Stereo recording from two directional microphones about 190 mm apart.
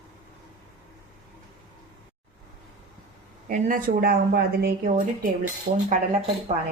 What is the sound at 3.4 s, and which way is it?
Speech, 45° right (ahead or behind).